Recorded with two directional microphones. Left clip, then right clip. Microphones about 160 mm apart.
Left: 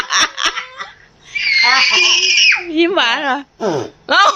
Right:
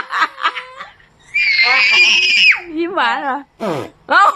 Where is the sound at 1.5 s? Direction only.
35° right (ahead or behind).